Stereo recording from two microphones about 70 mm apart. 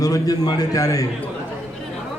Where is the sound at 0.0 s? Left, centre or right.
Left.